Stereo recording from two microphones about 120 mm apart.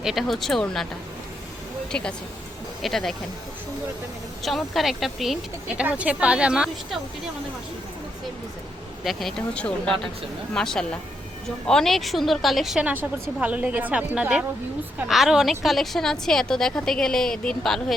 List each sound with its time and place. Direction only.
0.0 s a woman's voice: centre (ahead or behind)
1.9 s a woman's voice: 10° left (ahead or behind)
4.4 s speech: centre (ahead or behind)
9.0 s a woman's voice: centre (ahead or behind)